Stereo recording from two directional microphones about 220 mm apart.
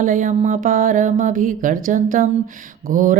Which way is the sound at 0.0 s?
35° right (ahead or behind).